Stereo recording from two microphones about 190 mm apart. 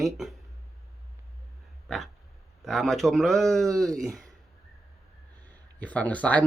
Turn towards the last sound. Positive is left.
turn(degrees=10)  # may be behind; listen again after turning